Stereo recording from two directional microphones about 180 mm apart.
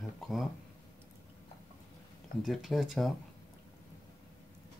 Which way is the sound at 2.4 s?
Centre (ahead or behind).